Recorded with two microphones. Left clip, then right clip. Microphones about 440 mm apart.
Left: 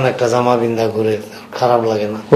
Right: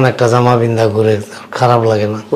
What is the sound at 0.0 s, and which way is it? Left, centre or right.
Speech, right.